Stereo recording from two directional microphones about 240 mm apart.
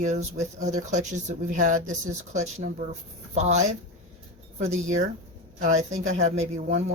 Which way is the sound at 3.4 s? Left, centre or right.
Right.